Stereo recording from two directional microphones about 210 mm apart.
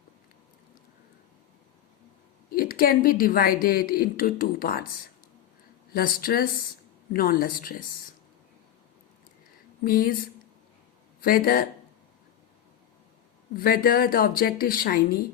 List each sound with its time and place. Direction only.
2.5 s a woman's voice: 45° left (ahead or behind)
5.9 s a woman's voice: 45° left (ahead or behind)
9.8 s a woman's voice: 45° left (ahead or behind)
11.2 s a woman's voice: 45° left (ahead or behind)
13.6 s a woman's voice: 45° left (ahead or behind)